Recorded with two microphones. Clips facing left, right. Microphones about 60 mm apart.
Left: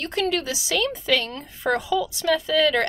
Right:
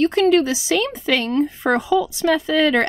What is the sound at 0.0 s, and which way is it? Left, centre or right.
A woman's voice, right.